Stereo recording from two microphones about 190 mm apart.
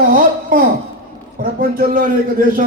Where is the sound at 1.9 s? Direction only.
50° right (ahead or behind).